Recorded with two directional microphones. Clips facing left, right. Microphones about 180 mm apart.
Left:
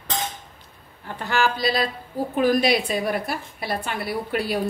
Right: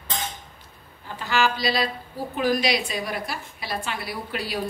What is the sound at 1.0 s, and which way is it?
A woman's voice, 60° left (ahead or behind).